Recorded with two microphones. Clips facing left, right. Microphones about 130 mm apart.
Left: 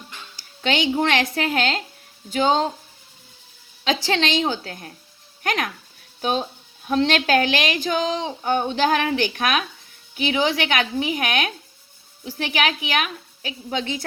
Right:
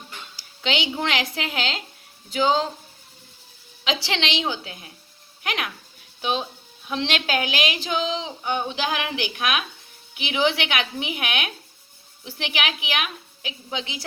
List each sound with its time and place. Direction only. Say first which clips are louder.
0.3 s speech: left 3 dB; 45° left (ahead or behind)
3.8 s a woman's voice: left 4 dB; 45° left (ahead or behind)
6.8 s a woman's voice: left 6 dB; 45° left (ahead or behind)